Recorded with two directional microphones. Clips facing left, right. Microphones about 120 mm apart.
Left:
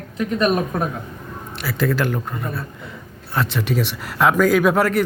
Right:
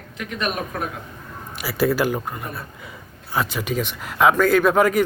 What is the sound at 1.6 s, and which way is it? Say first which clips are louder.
Speech: right 1 dB; 5° right (ahead or behind).